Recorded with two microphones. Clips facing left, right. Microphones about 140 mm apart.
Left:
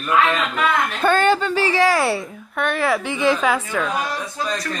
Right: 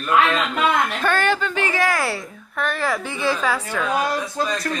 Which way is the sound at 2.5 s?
Centre (ahead or behind).